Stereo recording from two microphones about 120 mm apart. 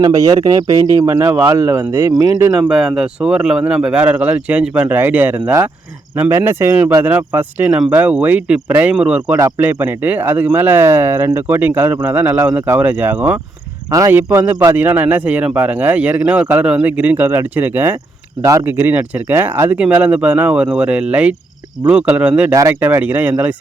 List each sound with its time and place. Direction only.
0.0 s speech: 30° right (ahead or behind)
2.6 s speech: 5° right (ahead or behind)